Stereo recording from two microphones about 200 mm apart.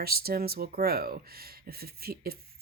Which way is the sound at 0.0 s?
50° right (ahead or behind).